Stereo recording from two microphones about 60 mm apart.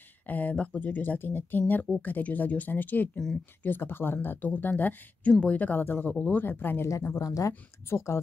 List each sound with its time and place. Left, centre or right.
0.3 s speech: left
7.2 s speech: left
7.9 s speech: left